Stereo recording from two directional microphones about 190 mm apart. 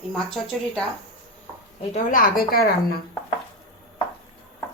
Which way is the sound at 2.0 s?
45° left (ahead or behind).